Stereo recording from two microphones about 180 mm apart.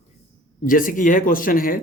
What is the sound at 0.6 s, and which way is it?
Speech, 50° left (ahead or behind).